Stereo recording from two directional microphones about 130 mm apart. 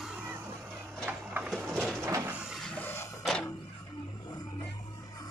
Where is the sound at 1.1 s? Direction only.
10° right (ahead or behind).